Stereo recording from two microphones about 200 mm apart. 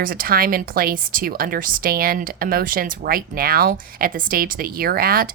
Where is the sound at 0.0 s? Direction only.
45° right (ahead or behind).